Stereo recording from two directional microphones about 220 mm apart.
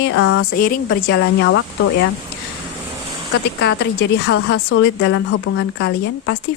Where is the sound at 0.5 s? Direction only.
40° left (ahead or behind).